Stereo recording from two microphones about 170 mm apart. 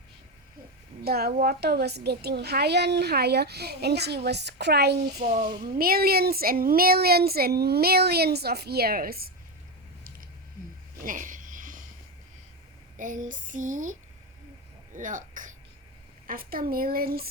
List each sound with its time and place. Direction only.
1.0 s a woman's voice: 65° right (ahead or behind)
5.3 s speech: 55° right (ahead or behind)
11.0 s a sound: 50° right (ahead or behind)
13.0 s female singing: 50° right (ahead or behind)
14.9 s speech: 50° right (ahead or behind)